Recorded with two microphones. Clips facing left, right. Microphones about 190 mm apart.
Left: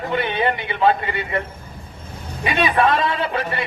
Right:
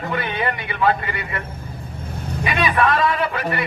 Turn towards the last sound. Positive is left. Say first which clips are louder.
# right 1 dB
turn(degrees=25)  # may be behind; listen again after turning